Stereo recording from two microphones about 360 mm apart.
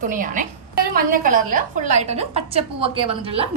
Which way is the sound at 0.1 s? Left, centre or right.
Right.